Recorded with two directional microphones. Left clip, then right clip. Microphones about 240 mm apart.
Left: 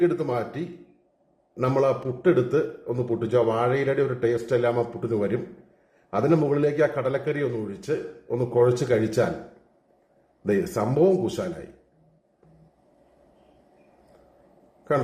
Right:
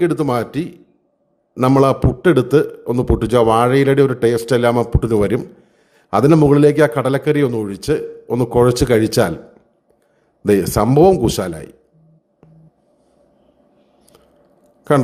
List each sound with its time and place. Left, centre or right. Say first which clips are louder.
0.0 s a man's voice: right 7 dB; right
10.4 s a man's voice: right 10 dB; right